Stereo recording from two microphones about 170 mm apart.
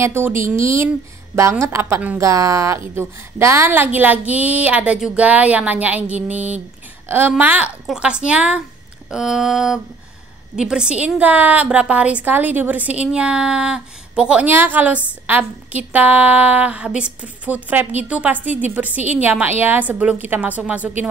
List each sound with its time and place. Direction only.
0.0 s a woman's voice: 15° right (ahead or behind)
9.1 s a sound: 5° right (ahead or behind)
10.5 s a woman's voice: 5° right (ahead or behind)